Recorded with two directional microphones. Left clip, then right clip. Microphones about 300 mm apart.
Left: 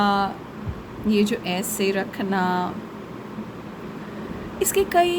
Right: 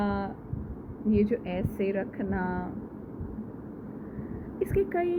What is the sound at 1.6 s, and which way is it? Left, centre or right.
Speech, left.